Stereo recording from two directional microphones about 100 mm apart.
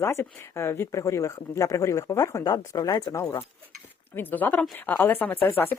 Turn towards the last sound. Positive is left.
turn(degrees=20)  # may be behind; listen again after turning